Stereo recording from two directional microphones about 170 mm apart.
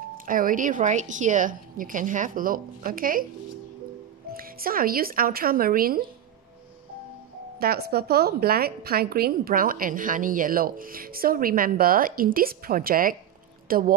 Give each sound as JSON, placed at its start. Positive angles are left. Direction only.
{"t": 0.2, "sound": "a woman's voice", "side_deg": -55}
{"t": 4.3, "sound": "a woman's voice", "side_deg": -60}
{"t": 7.5, "sound": "a woman's voice", "side_deg": -65}